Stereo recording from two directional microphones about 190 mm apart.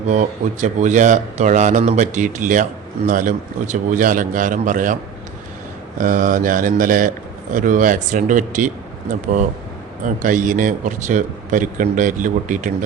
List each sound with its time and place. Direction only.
0.1 s a man's voice: 40° right (ahead or behind)
6.0 s a man's voice: 45° right (ahead or behind)